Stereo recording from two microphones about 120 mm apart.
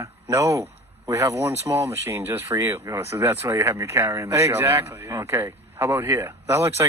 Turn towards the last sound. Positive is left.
turn(degrees=-25)  # may be behind; listen again after turning